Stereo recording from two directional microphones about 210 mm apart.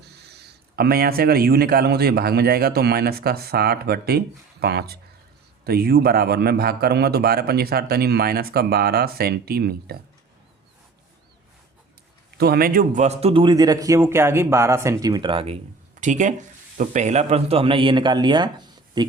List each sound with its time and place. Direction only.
0.3 s a man's voice: 50° right (ahead or behind)
12.4 s a man's voice: 45° right (ahead or behind); by 19.1 s 20° right (ahead or behind)